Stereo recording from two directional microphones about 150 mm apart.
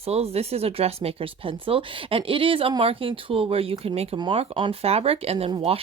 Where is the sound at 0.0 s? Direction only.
45° right (ahead or behind).